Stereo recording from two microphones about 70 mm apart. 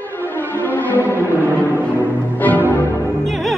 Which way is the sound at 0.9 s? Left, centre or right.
Right.